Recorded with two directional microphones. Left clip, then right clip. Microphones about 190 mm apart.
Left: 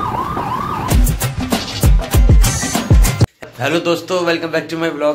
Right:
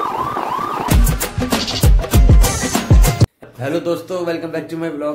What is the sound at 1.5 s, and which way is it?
Music, centre (ahead or behind).